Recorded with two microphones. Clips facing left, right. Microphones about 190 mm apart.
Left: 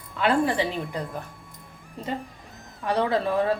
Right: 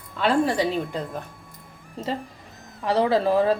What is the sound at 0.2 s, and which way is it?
Speech, 35° right (ahead or behind).